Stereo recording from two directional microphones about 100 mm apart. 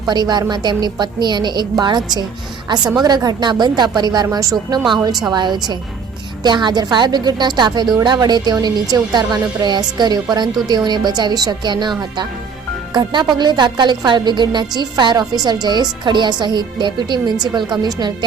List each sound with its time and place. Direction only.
0.1 s speech: 45° right (ahead or behind)